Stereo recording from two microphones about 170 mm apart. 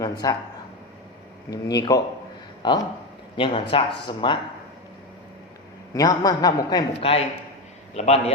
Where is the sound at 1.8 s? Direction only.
20° left (ahead or behind).